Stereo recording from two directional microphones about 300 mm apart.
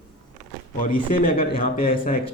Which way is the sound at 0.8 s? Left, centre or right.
Left.